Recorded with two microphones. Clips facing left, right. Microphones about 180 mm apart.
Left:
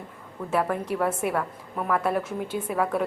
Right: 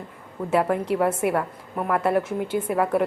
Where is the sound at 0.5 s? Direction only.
10° right (ahead or behind).